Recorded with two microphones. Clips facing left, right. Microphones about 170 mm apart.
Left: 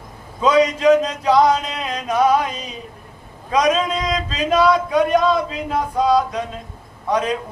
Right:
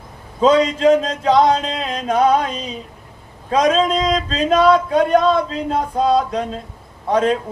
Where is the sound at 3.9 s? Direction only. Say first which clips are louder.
Right 4 dB; 30° right (ahead or behind).